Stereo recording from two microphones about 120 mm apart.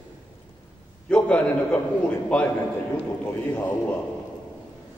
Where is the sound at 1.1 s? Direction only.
10° left (ahead or behind).